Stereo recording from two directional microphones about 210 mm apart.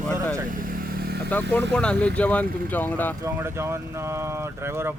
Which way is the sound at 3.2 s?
10° right (ahead or behind).